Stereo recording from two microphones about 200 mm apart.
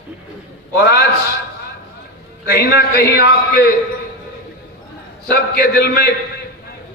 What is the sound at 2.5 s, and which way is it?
A man's voice, 55° left (ahead or behind).